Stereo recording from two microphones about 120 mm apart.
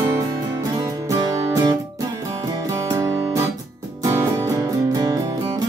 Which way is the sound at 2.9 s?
30° right (ahead or behind).